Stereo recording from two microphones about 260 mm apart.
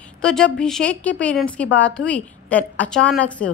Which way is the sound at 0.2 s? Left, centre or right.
Centre.